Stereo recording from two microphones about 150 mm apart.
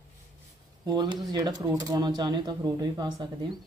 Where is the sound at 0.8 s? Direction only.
30° right (ahead or behind).